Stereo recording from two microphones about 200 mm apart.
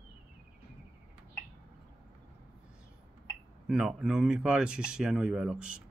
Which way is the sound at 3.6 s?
5° right (ahead or behind).